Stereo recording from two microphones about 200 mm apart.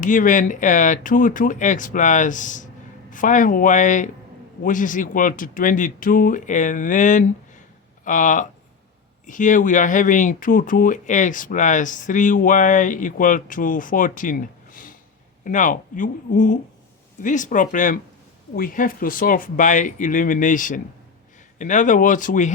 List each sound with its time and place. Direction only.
0.0 s speech: 40° left (ahead or behind)